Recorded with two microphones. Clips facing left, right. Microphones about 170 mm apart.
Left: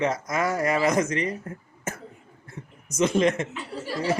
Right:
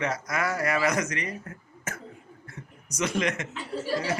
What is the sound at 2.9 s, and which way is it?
Speech, 25° left (ahead or behind).